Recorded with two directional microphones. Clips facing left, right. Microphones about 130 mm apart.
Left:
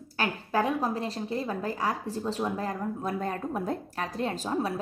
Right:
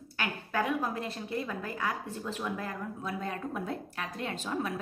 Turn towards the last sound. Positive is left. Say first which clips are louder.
# left 4 dB
turn(degrees=35)  # may be behind; listen again after turning